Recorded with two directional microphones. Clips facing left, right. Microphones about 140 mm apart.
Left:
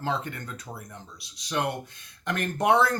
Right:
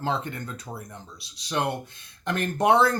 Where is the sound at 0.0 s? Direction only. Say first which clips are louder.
Right 2 dB; 30° right (ahead or behind).